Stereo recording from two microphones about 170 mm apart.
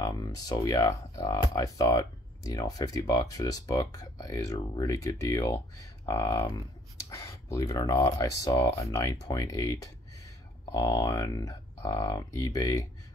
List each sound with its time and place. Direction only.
0.0 s speech: 20° left (ahead or behind)